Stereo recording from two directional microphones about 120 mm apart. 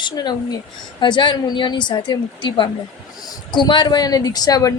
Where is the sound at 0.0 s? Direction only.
35° left (ahead or behind).